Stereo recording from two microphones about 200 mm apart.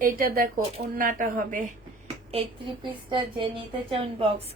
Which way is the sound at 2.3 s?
25° right (ahead or behind).